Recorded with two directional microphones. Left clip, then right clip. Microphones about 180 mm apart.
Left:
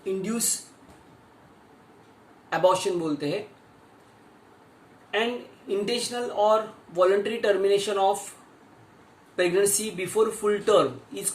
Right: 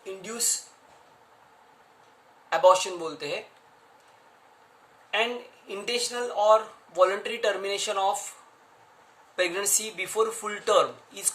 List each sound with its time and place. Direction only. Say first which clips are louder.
0.0 s a sound: left 6 dB; 10° right (ahead or behind)
2.5 s speech: right 2 dB; 20° right (ahead or behind)
5.1 s speech: even; 20° right (ahead or behind)
9.3 s speech: left 4 dB; 20° right (ahead or behind)